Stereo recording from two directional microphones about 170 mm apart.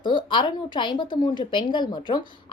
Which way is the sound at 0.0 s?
30° left (ahead or behind).